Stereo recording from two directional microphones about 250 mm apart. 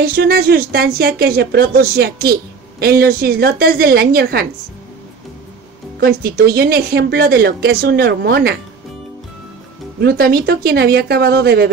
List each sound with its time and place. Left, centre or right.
0.0 s speech: right
5.9 s speech: right
9.9 s speech: right